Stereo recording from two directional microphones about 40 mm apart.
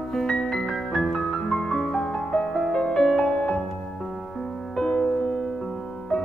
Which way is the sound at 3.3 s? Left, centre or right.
Left.